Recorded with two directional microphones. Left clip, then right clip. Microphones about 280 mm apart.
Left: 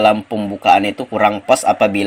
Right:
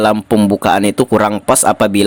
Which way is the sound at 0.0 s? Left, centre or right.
Right.